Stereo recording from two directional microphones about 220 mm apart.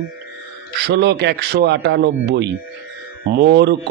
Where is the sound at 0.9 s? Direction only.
50° right (ahead or behind).